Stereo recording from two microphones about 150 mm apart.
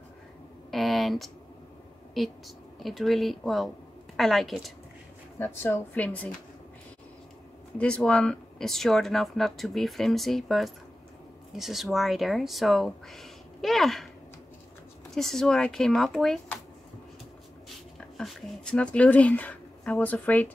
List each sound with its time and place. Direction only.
0.7 s a sound: centre (ahead or behind)
2.1 s speech: centre (ahead or behind)
5.4 s speech: 15° left (ahead or behind)
7.7 s speech: 5° left (ahead or behind)
15.1 s speech: centre (ahead or behind)
18.1 s speech: centre (ahead or behind)